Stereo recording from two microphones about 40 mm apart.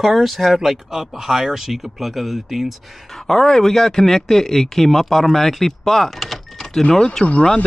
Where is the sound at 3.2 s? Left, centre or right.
Centre.